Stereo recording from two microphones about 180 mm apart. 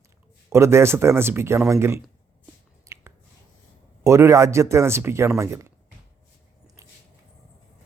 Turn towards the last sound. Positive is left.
turn(degrees=-15)  # may be behind; listen again after turning